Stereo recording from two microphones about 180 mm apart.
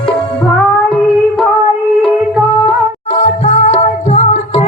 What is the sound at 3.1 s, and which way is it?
Music, 40° left (ahead or behind).